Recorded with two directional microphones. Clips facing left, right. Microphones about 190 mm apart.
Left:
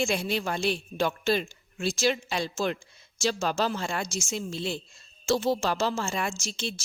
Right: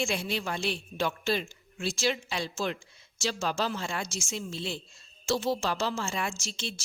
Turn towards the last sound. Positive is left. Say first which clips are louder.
# left 4 dB
turn(degrees=45)  # may be behind; listen again after turning